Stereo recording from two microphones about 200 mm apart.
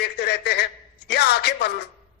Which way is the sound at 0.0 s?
55° left (ahead or behind).